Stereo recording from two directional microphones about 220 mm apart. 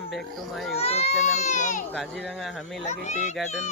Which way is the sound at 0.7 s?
30° left (ahead or behind).